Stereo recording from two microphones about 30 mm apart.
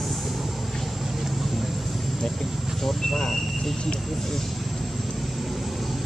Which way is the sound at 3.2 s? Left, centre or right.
Centre.